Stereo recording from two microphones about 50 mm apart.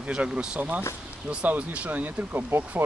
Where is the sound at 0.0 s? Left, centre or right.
Centre.